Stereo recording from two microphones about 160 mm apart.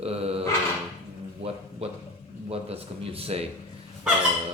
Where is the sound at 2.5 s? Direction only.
40° right (ahead or behind).